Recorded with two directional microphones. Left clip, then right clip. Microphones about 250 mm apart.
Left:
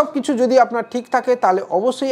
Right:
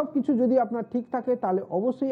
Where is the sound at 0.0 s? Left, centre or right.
Centre.